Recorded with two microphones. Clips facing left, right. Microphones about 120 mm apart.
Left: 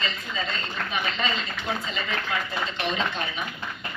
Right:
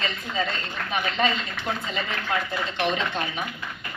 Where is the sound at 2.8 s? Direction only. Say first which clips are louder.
Right 3 dB; 55° right (ahead or behind).